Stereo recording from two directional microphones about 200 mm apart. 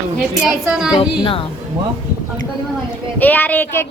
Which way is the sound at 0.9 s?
25° left (ahead or behind).